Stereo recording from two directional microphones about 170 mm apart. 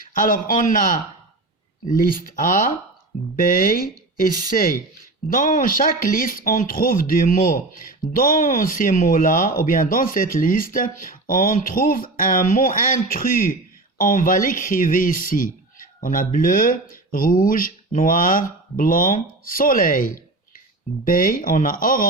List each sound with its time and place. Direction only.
0.1 s speech: 55° left (ahead or behind)